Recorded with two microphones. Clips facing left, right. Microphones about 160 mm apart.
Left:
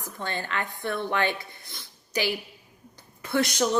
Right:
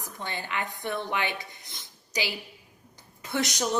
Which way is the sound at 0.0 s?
15° right (ahead or behind).